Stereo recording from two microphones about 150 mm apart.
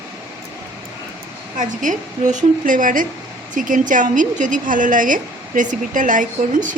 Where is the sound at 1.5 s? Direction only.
60° right (ahead or behind).